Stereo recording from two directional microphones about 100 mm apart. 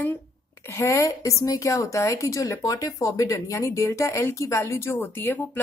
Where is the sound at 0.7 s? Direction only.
30° left (ahead or behind).